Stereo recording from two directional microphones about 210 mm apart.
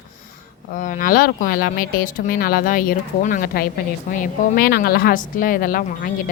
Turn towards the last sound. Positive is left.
turn(degrees=40)  # may be behind; listen again after turning